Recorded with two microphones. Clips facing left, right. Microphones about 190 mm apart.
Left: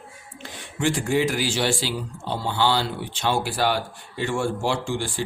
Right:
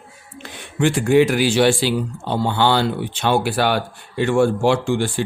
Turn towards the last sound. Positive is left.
turn(degrees=-60)  # may be behind; listen again after turning